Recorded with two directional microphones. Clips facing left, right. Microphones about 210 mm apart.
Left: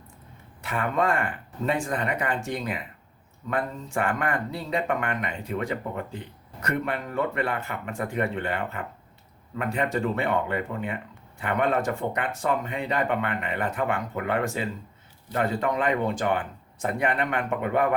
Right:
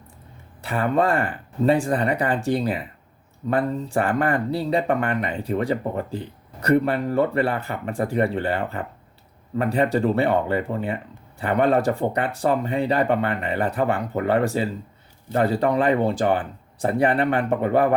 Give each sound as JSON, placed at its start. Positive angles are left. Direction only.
{"t": 0.6, "sound": "speech", "side_deg": -35}